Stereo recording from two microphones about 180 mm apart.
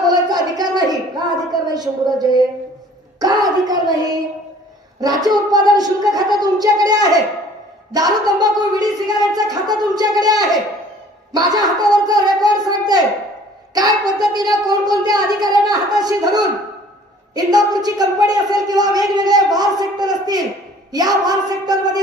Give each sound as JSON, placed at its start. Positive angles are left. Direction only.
{"t": 0.1, "sound": "a sound", "side_deg": -20}
{"t": 3.2, "sound": "speech", "side_deg": -20}
{"t": 5.0, "sound": "a woman's voice", "side_deg": -20}